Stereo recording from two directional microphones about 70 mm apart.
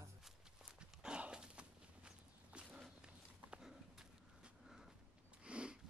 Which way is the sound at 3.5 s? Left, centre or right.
Centre.